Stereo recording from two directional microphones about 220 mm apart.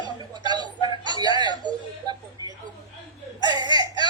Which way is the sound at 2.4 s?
15° left (ahead or behind).